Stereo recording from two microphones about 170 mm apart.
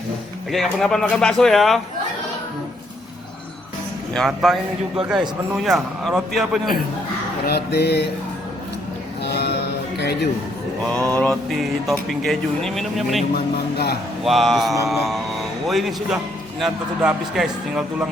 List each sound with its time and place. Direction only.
0.5 s speech: centre (ahead or behind)
4.1 s speech: centre (ahead or behind)
5.5 s speech: centre (ahead or behind)
7.4 s a sound: 70° left (ahead or behind)
9.2 s a sound: 75° left (ahead or behind)
10.0 s speech: 80° left
11.1 s speech: 5° left (ahead or behind)
13.3 s a sound: 70° left (ahead or behind)
14.3 s speech: centre (ahead or behind)